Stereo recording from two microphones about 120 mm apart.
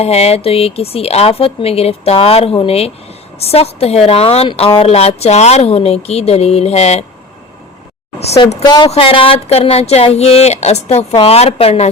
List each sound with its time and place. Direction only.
0.0 s a woman's voice: 60° left (ahead or behind)
8.6 s speech: 35° left (ahead or behind)
8.9 s a woman's voice: 50° left (ahead or behind)